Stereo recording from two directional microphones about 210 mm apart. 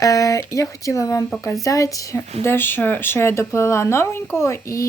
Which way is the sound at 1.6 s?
15° left (ahead or behind).